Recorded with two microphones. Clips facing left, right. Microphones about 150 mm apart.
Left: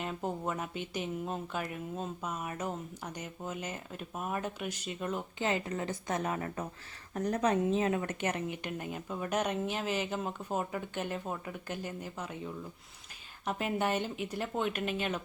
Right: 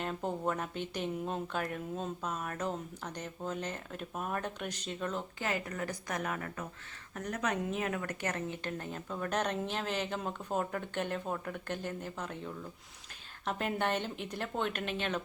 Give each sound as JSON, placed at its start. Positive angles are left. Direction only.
{"t": 0.0, "sound": "a woman's voice", "side_deg": 5}
{"t": 5.4, "sound": "a woman's voice", "side_deg": 25}